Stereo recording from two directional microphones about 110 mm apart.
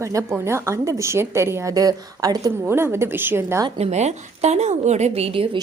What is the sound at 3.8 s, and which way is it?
A woman's voice, 90° right.